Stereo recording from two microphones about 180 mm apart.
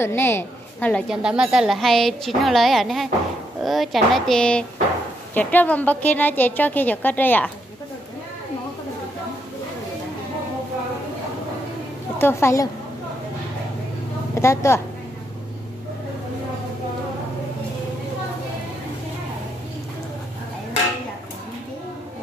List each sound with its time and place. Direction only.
0.0 s a woman's voice: 15° left (ahead or behind)
1.0 s a woman's voice: 5° right (ahead or behind)
12.2 s a woman's voice: 15° left (ahead or behind)
14.3 s a woman's voice: 15° left (ahead or behind)